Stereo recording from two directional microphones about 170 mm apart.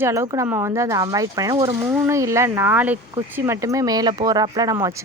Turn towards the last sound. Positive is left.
turn(degrees=-20)  # may be behind; listen again after turning